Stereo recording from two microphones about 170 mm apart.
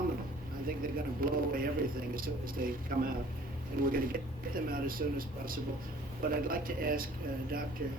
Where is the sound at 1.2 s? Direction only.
55° right (ahead or behind).